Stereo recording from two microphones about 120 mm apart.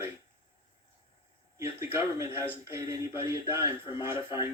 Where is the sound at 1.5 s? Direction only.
25° right (ahead or behind).